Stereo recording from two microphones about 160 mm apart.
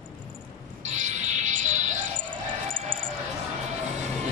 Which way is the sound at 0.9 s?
50° right (ahead or behind).